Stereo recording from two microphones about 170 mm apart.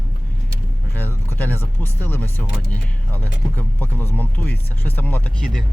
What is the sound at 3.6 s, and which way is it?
Speech, 10° left (ahead or behind).